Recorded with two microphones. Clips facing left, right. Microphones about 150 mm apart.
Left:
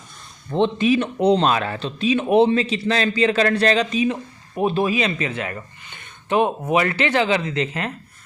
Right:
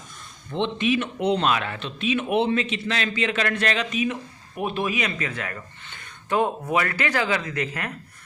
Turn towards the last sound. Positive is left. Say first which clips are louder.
# left 5 dB
turn(degrees=25)  # may be behind; listen again after turning